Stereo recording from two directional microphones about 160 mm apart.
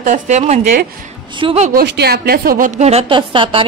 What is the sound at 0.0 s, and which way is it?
Speech, 45° right (ahead or behind).